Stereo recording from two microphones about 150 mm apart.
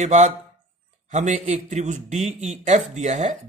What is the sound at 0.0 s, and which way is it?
A man's voice, 55° right (ahead or behind).